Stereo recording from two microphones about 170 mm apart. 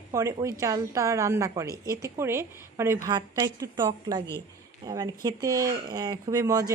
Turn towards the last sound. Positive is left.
turn(degrees=-20)  # may be behind; listen again after turning